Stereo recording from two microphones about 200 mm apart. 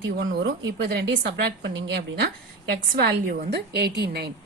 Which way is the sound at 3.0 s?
50° right (ahead or behind).